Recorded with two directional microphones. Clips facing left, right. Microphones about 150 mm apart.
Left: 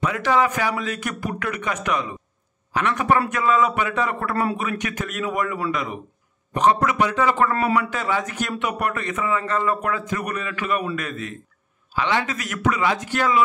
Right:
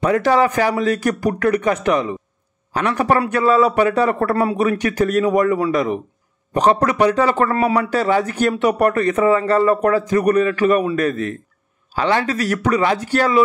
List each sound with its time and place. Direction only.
0.0 s speech: 40° right (ahead or behind)